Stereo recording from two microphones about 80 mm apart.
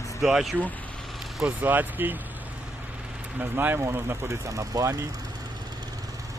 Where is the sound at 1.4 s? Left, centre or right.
Right.